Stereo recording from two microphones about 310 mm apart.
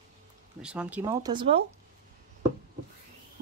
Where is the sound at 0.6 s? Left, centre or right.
Centre.